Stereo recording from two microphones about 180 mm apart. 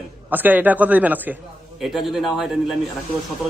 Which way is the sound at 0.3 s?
10° right (ahead or behind).